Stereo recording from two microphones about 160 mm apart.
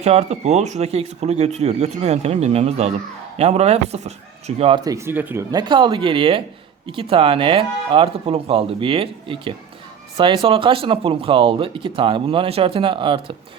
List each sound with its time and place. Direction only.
0.0 s speech: 40° right (ahead or behind)
4.9 s speech: 15° right (ahead or behind); by 13.3 s 30° right (ahead or behind)